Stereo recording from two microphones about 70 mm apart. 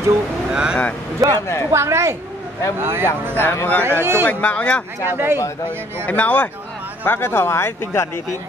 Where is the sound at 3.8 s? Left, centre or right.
Right.